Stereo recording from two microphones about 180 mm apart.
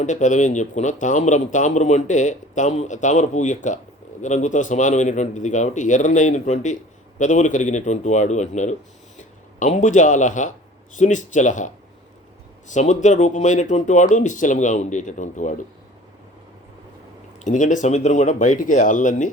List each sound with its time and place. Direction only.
0.0 s a man's voice: 45° left (ahead or behind)
17.4 s speech: 45° left (ahead or behind)